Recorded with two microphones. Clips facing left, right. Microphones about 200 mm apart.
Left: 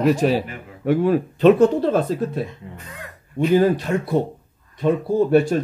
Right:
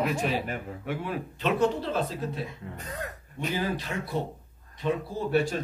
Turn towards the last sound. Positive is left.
turn(degrees=50)  # may be behind; listen again after turning